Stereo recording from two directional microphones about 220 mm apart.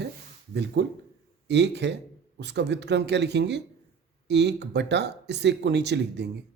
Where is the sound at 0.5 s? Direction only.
50° right (ahead or behind).